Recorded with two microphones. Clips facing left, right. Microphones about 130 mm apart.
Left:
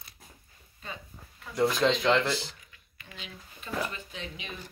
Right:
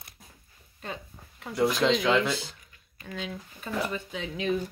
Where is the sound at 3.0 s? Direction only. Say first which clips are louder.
Right 10 dB; 40° right (ahead or behind).